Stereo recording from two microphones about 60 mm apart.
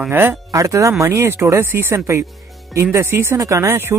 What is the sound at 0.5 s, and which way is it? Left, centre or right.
Speech, right.